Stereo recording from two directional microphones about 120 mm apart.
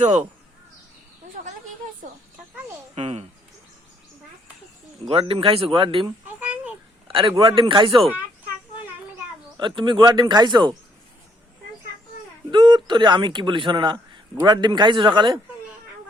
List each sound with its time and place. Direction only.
0.0 s speech: 70° right (ahead or behind)
2.9 s speech: 60° right (ahead or behind)
5.0 s speech: 50° right (ahead or behind)
6.2 s a sound: 10° right (ahead or behind)
7.1 s a man's voice: 50° right (ahead or behind)
9.6 s speech: 40° right (ahead or behind)
12.5 s speech: 40° right (ahead or behind)